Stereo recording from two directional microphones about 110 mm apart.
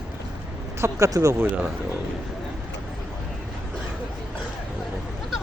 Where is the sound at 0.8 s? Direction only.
30° right (ahead or behind).